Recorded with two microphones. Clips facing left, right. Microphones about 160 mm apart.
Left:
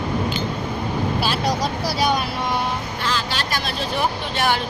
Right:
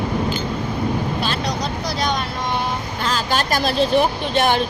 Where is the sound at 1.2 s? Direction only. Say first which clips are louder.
Left 1 dB; 5° left (ahead or behind).